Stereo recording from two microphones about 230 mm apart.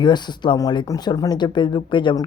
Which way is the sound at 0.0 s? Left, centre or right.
Centre.